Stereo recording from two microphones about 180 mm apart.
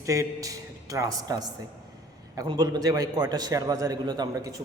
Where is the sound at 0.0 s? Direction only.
15° right (ahead or behind).